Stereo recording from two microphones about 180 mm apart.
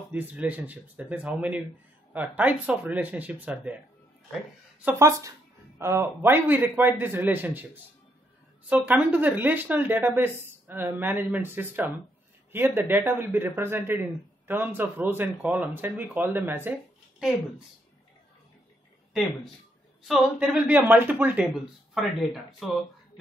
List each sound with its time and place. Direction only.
0.1 s speech: 10° right (ahead or behind)
4.8 s speech: 15° right (ahead or behind)
20.0 s speech: 5° right (ahead or behind)